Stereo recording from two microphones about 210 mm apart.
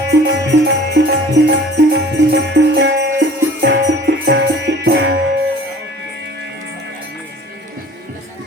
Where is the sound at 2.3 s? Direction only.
50° right (ahead or behind).